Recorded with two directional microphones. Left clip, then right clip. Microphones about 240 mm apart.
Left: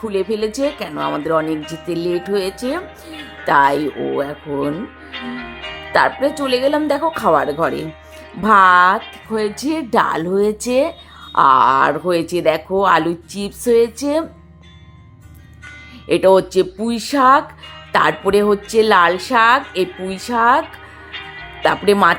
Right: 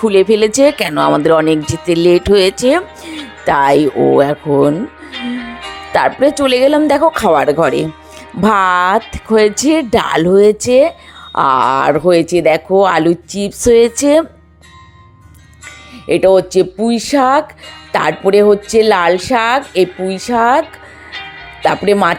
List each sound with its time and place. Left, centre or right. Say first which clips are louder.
0.0 s speech: right 10 dB; right
5.9 s speech: right 4 dB; right
16.0 s speech: right 3 dB; right